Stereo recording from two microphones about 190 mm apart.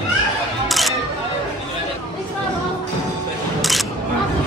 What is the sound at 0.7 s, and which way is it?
Camera, centre (ahead or behind).